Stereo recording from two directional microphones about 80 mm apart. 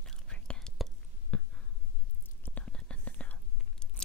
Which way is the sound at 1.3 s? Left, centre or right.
Centre.